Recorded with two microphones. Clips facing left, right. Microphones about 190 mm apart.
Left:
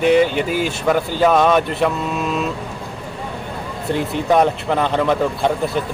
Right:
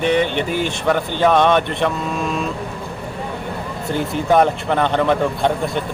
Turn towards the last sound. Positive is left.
turn(degrees=0)  # may be behind; listen again after turning